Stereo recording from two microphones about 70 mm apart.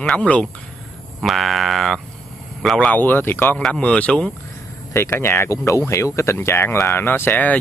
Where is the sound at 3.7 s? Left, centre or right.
Centre.